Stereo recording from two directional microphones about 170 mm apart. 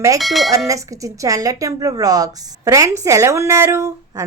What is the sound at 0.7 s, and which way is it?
Speech, 20° right (ahead or behind).